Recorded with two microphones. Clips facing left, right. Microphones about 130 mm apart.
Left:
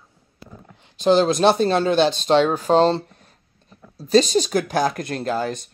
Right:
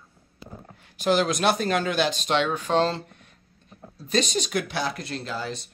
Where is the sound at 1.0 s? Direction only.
30° left (ahead or behind); by 5.6 s 50° left (ahead or behind).